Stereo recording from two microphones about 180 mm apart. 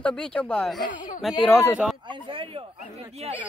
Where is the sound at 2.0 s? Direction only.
30° right (ahead or behind).